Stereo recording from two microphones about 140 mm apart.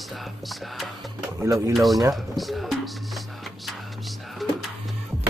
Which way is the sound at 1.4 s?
25° right (ahead or behind).